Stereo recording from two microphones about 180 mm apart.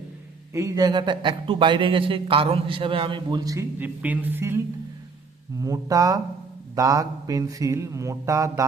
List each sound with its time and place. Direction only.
0.5 s speech: 15° right (ahead or behind)
6.7 s mantra: 20° right (ahead or behind)